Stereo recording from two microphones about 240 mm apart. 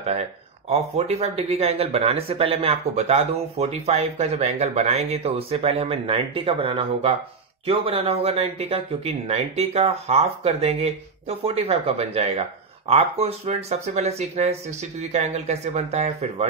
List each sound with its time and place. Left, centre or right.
0.0 s speech: right